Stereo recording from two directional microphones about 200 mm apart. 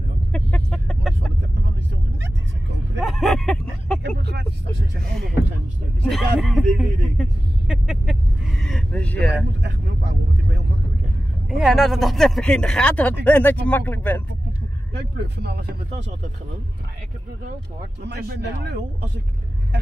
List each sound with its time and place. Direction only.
0.3 s chicken: 5° left (ahead or behind)
3.0 s vehicle: centre (ahead or behind)
4.3 s vehicle: 55° right (ahead or behind)
6.0 s a sound: centre (ahead or behind)
6.8 s vehicle: 5° right (ahead or behind)
9.6 s vehicle: 60° right (ahead or behind)
11.5 s speech: centre (ahead or behind)
15.0 s speech: 55° right (ahead or behind)
18.0 s speech: 55° right (ahead or behind)